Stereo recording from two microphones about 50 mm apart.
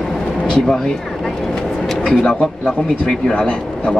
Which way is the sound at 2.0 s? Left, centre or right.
Centre.